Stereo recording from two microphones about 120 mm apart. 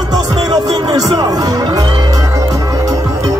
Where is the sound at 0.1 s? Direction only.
30° right (ahead or behind).